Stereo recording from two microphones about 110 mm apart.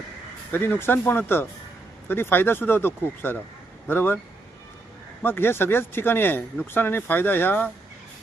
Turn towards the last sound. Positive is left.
turn(degrees=20)  # may be behind; listen again after turning